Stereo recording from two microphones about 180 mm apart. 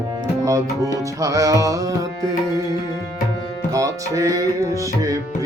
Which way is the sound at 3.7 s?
20° right (ahead or behind).